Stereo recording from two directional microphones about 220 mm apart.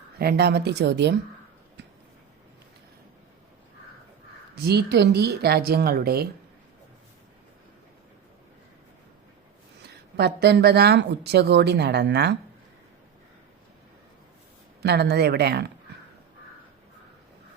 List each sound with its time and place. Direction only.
0.2 s speech: 45° right (ahead or behind)
4.5 s speech: 45° right (ahead or behind)
9.8 s speech: 50° right (ahead or behind)
14.8 s speech: 50° right (ahead or behind)